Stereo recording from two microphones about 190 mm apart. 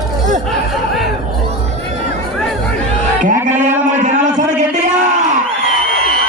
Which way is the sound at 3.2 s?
40° right (ahead or behind).